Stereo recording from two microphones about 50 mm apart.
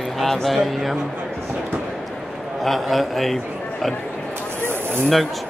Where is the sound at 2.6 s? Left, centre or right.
Centre.